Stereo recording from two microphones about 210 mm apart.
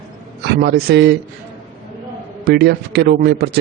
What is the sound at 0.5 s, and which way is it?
Speech, 50° right (ahead or behind).